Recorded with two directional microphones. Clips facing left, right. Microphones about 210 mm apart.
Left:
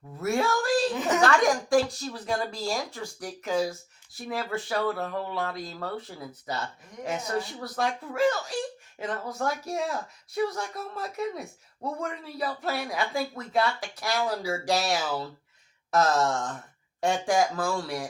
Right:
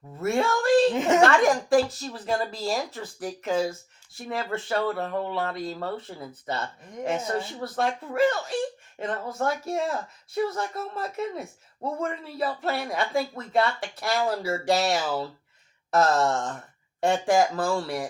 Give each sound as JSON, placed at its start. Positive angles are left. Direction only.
{"t": 0.2, "sound": "a sound", "side_deg": 0}
{"t": 0.9, "sound": "a woman's voice", "side_deg": -25}
{"t": 1.2, "sound": "a woman's voice", "side_deg": 0}